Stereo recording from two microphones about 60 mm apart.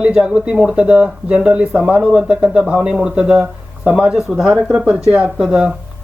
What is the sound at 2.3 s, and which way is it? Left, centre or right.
Speech, right.